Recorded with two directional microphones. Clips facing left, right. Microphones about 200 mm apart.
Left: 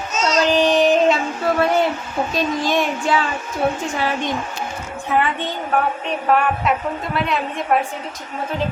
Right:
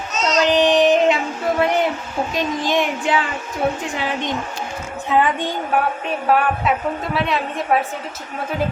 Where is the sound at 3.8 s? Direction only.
20° right (ahead or behind).